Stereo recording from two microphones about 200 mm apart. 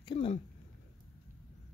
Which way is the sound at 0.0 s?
25° left (ahead or behind).